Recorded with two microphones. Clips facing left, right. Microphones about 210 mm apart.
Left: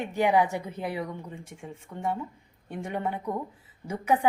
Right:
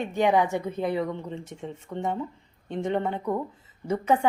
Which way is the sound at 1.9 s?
50° right (ahead or behind).